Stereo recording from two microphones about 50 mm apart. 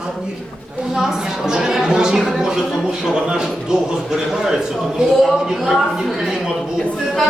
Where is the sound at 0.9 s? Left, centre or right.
Centre.